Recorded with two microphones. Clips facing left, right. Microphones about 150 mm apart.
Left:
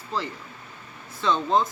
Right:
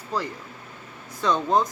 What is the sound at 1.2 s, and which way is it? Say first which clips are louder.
Speech: right 1 dB; 10° right (ahead or behind).